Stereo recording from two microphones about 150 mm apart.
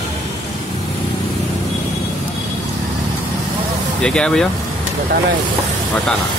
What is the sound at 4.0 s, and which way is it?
Speech, 5° left (ahead or behind).